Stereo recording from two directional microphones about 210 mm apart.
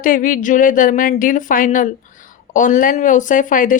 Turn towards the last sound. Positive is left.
turn(degrees=40)  # may be behind; listen again after turning